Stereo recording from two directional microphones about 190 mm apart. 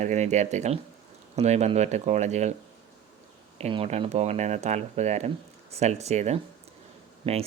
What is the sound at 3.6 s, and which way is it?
Speech, 35° right (ahead or behind).